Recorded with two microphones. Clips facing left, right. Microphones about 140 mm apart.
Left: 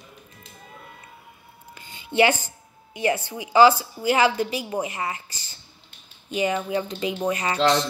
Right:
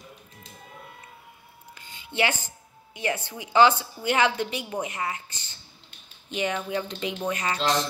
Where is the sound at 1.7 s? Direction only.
5° left (ahead or behind).